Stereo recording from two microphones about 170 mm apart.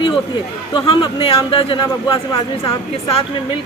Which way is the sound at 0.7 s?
30° left (ahead or behind).